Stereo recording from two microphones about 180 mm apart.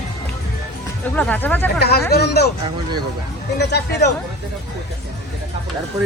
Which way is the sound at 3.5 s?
70° left (ahead or behind).